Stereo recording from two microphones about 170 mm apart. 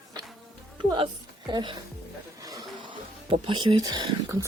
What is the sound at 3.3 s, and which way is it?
Speech, 30° right (ahead or behind).